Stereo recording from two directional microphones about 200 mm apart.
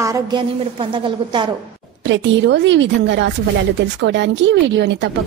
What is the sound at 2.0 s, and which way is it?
Speech, 65° right (ahead or behind).